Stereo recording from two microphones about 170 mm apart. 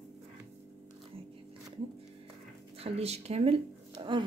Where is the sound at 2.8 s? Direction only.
35° right (ahead or behind).